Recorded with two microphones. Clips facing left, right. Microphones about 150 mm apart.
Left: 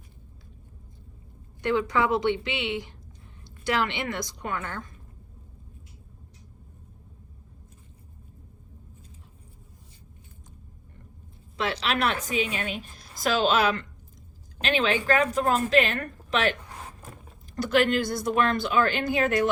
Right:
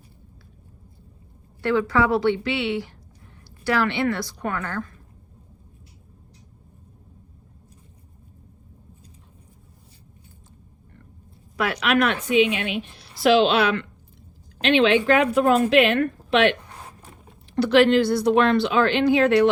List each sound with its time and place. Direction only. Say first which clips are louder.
1.6 s a woman's voice: right 4 dB; 20° left (ahead or behind)
11.5 s a woman's voice: right 6 dB; 30° left (ahead or behind)
17.6 s speech: right 7 dB; 45° left (ahead or behind)